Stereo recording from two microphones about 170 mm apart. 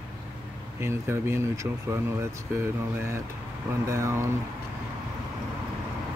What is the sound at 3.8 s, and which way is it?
Speech, 20° right (ahead or behind).